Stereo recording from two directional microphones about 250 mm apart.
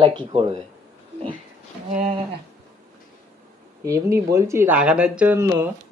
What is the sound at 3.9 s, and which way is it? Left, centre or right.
Speech, centre.